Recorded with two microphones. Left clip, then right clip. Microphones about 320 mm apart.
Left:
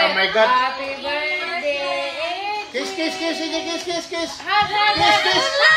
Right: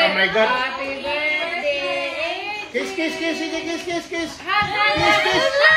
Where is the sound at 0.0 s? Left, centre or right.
Left.